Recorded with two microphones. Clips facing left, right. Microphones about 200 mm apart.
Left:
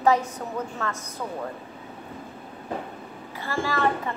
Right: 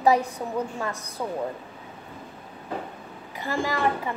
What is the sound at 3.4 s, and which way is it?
Speech, 15° right (ahead or behind).